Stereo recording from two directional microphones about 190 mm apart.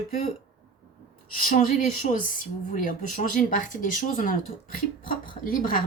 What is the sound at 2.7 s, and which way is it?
A woman's voice, 45° left (ahead or behind).